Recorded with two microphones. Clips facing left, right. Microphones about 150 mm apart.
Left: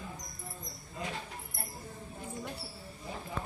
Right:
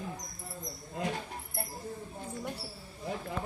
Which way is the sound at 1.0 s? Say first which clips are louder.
Right 5 dB; 65° right (ahead or behind).